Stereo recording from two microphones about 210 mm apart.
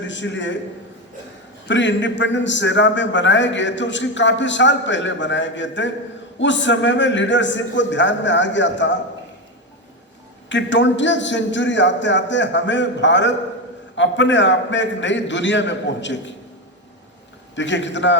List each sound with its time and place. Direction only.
0.0 s a man's voice: 60° left (ahead or behind)
1.6 s a man's voice: 60° left (ahead or behind)
10.5 s a man's voice: 60° left (ahead or behind)
17.5 s a man's voice: 60° left (ahead or behind)